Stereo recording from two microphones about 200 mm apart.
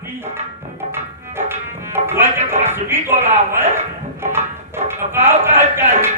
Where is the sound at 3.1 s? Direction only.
35° right (ahead or behind).